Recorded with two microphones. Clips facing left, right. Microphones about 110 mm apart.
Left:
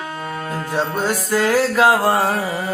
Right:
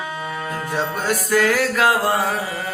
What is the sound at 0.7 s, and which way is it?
Music, 25° left (ahead or behind).